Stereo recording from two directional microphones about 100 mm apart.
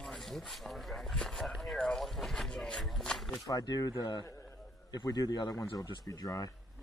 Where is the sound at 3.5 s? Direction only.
40° left (ahead or behind).